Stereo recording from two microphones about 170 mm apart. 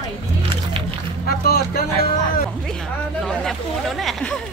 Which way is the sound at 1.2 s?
65° left (ahead or behind).